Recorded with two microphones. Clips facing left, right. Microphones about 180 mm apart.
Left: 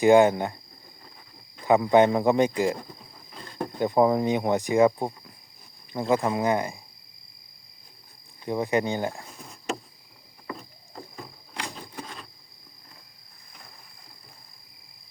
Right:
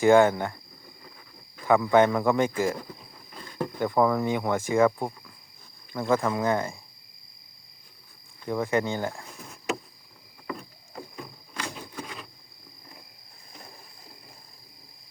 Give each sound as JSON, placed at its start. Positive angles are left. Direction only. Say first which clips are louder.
{"t": 0.0, "sound": "speech", "louder": "left 1 dB", "side_deg": 15}
{"t": 1.6, "sound": "speech", "louder": "left 1 dB", "side_deg": 20}
{"t": 3.8, "sound": "speech", "louder": "left 2 dB", "side_deg": 20}
{"t": 8.4, "sound": "speech", "louder": "left 1 dB", "side_deg": 20}
{"t": 10.4, "sound": "rowboat", "louder": "right 2 dB", "side_deg": 0}